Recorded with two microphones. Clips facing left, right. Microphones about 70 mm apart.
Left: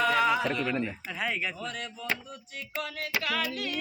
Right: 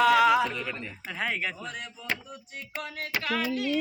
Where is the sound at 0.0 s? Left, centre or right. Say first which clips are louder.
Right 5 dB; right.